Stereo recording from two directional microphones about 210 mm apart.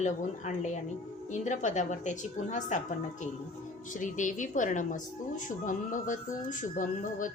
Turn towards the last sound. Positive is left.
turn(degrees=40)  # may be behind; listen again after turning